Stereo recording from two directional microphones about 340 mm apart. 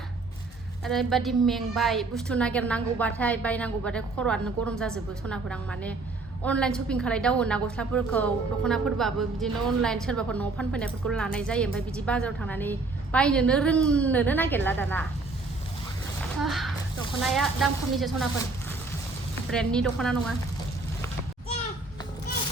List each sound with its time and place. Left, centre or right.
0.9 s a woman's voice: centre
16.4 s a sound: centre
17.3 s a woman's voice: centre
19.5 s a woman's voice: centre